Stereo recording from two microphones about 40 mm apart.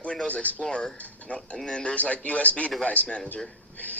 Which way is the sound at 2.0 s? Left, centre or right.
Left.